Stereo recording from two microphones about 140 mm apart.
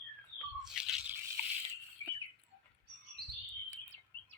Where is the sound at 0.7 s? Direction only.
5° right (ahead or behind).